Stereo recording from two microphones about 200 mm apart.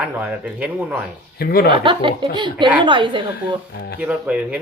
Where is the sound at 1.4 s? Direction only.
50° left (ahead or behind).